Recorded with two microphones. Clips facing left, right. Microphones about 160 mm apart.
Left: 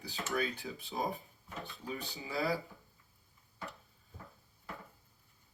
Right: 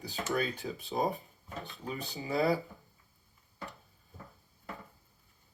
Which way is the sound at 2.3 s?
20° right (ahead or behind).